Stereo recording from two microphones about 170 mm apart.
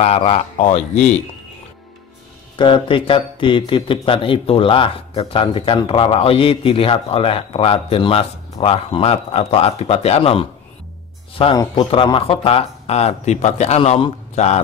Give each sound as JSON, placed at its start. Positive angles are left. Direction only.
{"t": 0.0, "sound": "a man's voice", "side_deg": 35}
{"t": 2.5, "sound": "a man's voice", "side_deg": 30}